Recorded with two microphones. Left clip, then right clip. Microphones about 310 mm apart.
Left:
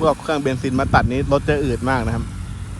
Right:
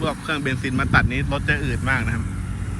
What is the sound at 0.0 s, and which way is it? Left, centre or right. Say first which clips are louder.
Speech: left 6 dB; centre.